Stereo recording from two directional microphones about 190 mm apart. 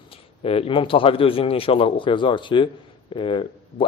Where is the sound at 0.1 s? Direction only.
30° left (ahead or behind).